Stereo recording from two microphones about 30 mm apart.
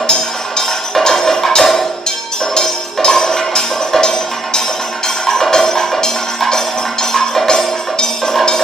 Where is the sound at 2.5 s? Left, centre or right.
Left.